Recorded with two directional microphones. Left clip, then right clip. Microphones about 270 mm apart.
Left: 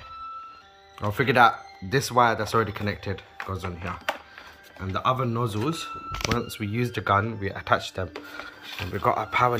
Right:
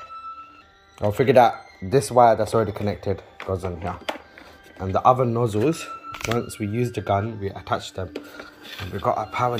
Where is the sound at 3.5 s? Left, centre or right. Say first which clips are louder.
Right 7 dB; centre.